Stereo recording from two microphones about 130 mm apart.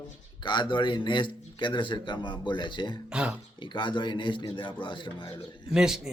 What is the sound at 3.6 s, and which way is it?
A man's voice, 40° left (ahead or behind).